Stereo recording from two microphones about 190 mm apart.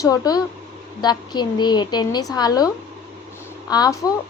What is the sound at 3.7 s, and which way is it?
Speech, 20° left (ahead or behind).